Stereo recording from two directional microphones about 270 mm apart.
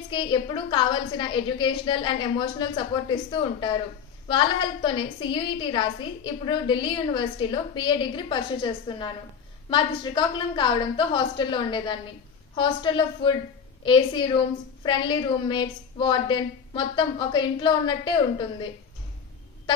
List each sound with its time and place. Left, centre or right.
0.1 s a woman's voice: centre